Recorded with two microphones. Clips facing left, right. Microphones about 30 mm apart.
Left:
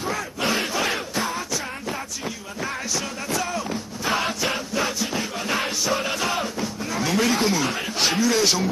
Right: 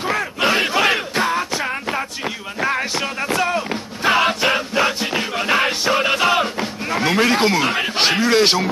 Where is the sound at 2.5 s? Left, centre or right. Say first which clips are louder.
Right 8 dB; right.